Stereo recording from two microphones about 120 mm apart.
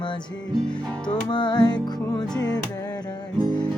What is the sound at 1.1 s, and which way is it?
Music, 40° left (ahead or behind).